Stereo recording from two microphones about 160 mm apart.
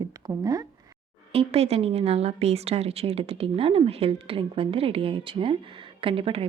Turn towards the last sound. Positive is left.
turn(degrees=-35)  # may be behind; listen again after turning